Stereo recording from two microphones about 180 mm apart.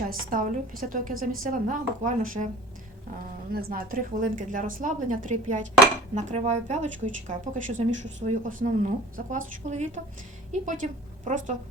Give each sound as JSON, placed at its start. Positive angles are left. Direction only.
{"t": 0.1, "sound": "speech", "side_deg": -50}
{"t": 3.5, "sound": "speech", "side_deg": -55}